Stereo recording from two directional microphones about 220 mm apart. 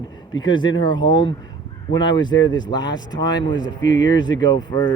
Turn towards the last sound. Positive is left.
turn(degrees=20)  # may be behind; listen again after turning